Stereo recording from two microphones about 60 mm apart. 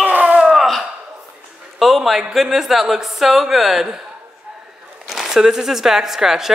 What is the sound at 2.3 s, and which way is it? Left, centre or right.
Speech, centre.